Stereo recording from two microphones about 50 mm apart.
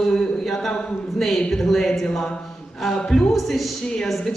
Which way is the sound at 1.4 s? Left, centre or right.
Centre.